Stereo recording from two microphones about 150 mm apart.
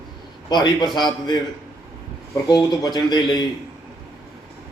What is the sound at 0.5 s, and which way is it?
Speech, 30° left (ahead or behind).